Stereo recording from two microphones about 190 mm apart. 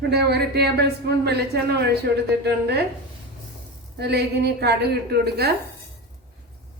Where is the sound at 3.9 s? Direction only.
60° right (ahead or behind).